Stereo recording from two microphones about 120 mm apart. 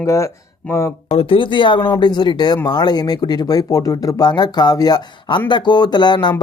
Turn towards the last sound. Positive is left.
turn(degrees=40)  # may be behind; listen again after turning